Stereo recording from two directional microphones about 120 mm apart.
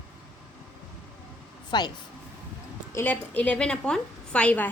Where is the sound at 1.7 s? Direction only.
40° left (ahead or behind).